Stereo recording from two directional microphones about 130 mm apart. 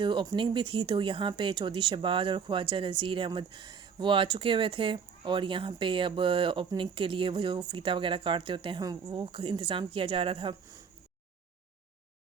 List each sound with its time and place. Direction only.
0.0 s speech: 35° right (ahead or behind)